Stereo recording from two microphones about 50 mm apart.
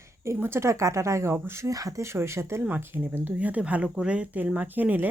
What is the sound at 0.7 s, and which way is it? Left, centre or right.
Speech, right.